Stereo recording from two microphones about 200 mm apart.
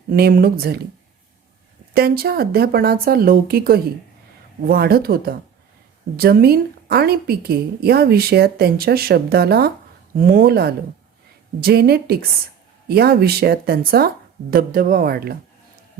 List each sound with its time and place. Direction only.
0.1 s a woman's voice: 50° right (ahead or behind)
1.9 s a woman's voice: 50° right (ahead or behind)